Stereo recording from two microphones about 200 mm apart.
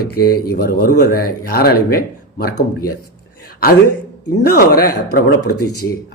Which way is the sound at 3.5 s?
50° left (ahead or behind).